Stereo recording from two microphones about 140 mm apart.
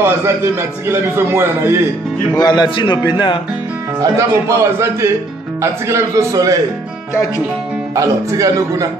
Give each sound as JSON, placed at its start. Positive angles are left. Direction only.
{"t": 0.0, "sound": "a man's voice", "side_deg": -15}
{"t": 2.3, "sound": "speech", "side_deg": 30}
{"t": 4.0, "sound": "a man's voice", "side_deg": -20}
{"t": 7.9, "sound": "a man's voice", "side_deg": -25}